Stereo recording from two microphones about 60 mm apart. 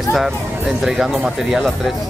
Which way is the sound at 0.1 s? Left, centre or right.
Centre.